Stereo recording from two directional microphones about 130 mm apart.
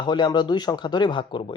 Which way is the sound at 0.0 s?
35° left (ahead or behind).